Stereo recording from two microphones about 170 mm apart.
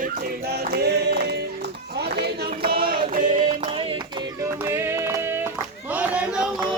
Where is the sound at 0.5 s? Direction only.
70° right (ahead or behind); by 3.9 s 35° right (ahead or behind).